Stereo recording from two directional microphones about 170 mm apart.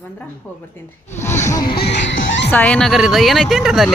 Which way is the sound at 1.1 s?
15° left (ahead or behind).